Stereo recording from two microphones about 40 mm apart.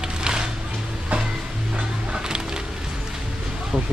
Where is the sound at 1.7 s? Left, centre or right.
Right.